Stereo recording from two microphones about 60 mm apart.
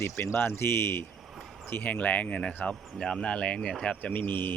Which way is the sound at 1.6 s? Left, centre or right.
Left.